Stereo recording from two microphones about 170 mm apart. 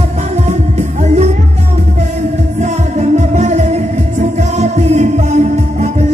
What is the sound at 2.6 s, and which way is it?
Music, 45° right (ahead or behind).